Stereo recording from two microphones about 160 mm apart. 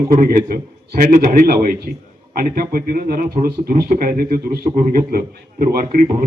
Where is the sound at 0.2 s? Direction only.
60° right (ahead or behind).